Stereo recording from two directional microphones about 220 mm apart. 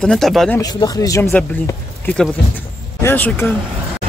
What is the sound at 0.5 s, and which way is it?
Speech, 15° left (ahead or behind).